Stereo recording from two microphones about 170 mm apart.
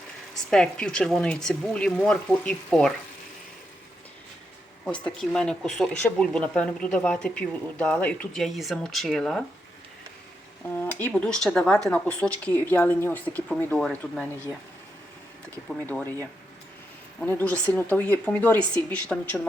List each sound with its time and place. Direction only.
0.5 s speech: 5° left (ahead or behind)
4.9 s speech: 5° left (ahead or behind)
10.8 s speech: 10° left (ahead or behind)
15.9 s speech: 10° left (ahead or behind)
17.2 s speech: 10° left (ahead or behind)